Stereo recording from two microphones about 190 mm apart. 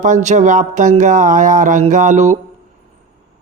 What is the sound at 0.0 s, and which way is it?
Speech, 40° right (ahead or behind).